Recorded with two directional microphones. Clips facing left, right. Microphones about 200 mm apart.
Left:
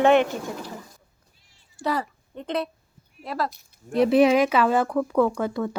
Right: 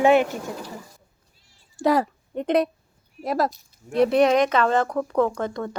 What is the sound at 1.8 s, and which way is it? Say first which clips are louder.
A woman's voice: right 6 dB; 45° right (ahead or behind).